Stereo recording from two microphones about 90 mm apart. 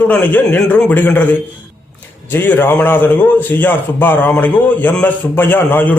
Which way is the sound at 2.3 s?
25° left (ahead or behind).